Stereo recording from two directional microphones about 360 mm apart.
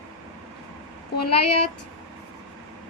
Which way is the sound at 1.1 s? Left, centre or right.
Left.